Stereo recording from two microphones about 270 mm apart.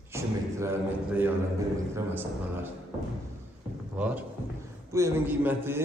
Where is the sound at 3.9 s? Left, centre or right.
Centre.